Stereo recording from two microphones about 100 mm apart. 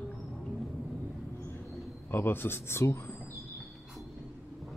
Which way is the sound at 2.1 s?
20° left (ahead or behind).